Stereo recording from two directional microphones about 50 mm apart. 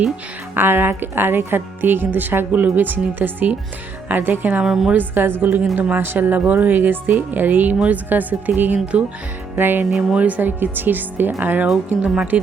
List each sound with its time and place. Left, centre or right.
0.5 s speech: right
4.6 s a woman's voice: centre
4.9 s speech: right
12.0 s a woman's voice: centre